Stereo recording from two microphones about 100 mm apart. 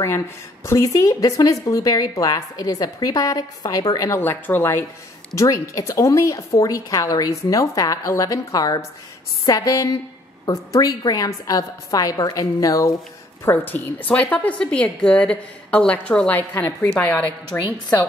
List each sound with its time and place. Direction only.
0.7 s a woman's voice: 30° left (ahead or behind)
4.1 s speech: 20° left (ahead or behind)
5.4 s a woman's voice: 30° left (ahead or behind)
13.5 s a woman's voice: 20° left (ahead or behind)
16.6 s a woman's voice: 25° left (ahead or behind)